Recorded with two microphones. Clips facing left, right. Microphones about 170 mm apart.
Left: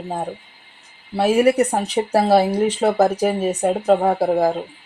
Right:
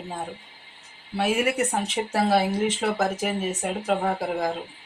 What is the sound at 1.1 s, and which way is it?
Speech, 35° left (ahead or behind).